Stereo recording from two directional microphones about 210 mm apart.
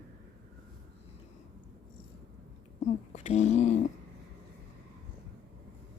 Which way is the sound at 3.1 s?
35° left (ahead or behind).